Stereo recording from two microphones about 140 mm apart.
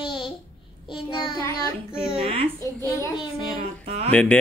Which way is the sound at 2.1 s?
40° right (ahead or behind).